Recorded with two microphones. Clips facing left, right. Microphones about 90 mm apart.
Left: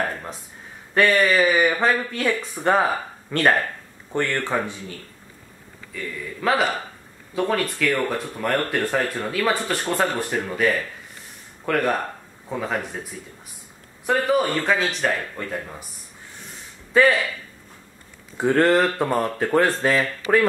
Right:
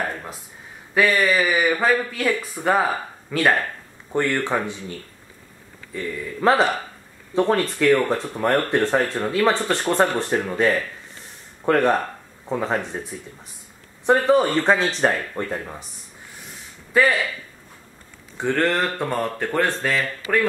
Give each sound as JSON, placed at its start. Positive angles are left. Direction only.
{"t": 0.9, "sound": "speech", "side_deg": 0}
{"t": 4.1, "sound": "speech", "side_deg": -15}
{"t": 6.4, "sound": "speech", "side_deg": -30}
{"t": 11.6, "sound": "speech", "side_deg": -25}
{"t": 14.0, "sound": "speech", "side_deg": -30}
{"t": 15.5, "sound": "speech", "side_deg": -15}
{"t": 17.0, "sound": "speech", "side_deg": 0}
{"t": 18.4, "sound": "speech", "side_deg": 5}